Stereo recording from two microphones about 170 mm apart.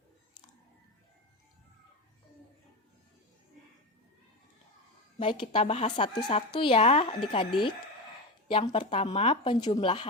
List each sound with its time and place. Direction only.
5.2 s speech: 30° left (ahead or behind)